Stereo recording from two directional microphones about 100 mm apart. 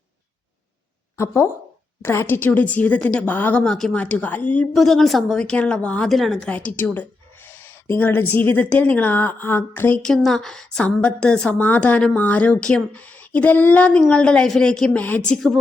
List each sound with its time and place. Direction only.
1.1 s a woman's voice: 25° left (ahead or behind)
3.6 s a woman's voice: 5° left (ahead or behind)
4.7 s a woman's voice: centre (ahead or behind)
6.5 s a woman's voice: 15° left (ahead or behind)
10.0 s a woman's voice: 5° left (ahead or behind)